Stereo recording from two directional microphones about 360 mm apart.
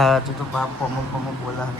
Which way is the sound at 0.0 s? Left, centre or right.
Centre.